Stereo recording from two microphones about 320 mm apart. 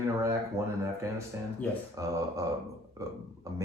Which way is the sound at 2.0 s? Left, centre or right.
Centre.